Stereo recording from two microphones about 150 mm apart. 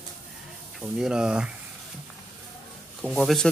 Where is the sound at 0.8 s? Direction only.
5° right (ahead or behind).